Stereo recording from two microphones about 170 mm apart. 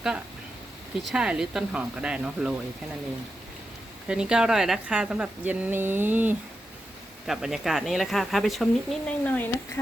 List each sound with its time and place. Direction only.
1.0 s speech: 5° right (ahead or behind)
4.1 s speech: 5° right (ahead or behind)